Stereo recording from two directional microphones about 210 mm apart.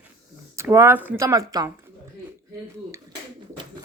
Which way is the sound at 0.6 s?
10° right (ahead or behind).